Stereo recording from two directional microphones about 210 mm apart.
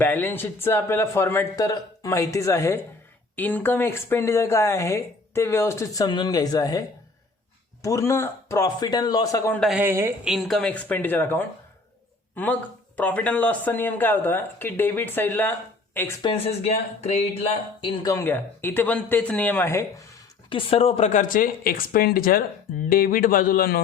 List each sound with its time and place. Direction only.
0.0 s speech: 10° left (ahead or behind)
9.6 s speech: 5° right (ahead or behind)
10.3 s speech: centre (ahead or behind)
13.0 s speech: 5° left (ahead or behind)
16.2 s speech: 30° left (ahead or behind); by 19.8 s 10° left (ahead or behind)
20.5 s a man's voice: 25° left (ahead or behind); by 23.8 s 45° left (ahead or behind)